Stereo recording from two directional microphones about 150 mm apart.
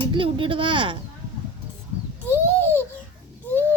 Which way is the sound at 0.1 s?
35° right (ahead or behind).